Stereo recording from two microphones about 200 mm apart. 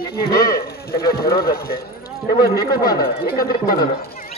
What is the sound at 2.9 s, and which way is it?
Speech, 45° left (ahead or behind).